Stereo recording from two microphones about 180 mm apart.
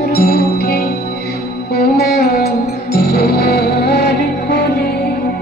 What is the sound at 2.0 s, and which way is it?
Music, 60° left (ahead or behind).